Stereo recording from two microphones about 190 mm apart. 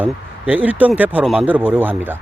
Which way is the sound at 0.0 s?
10° right (ahead or behind).